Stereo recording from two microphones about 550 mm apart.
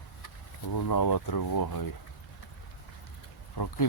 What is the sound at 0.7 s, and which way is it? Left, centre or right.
Speech, left.